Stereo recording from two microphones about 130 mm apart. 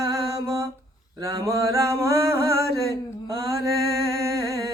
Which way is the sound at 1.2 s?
25° right (ahead or behind).